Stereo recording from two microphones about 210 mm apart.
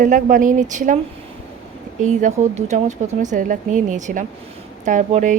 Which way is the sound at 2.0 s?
35° right (ahead or behind).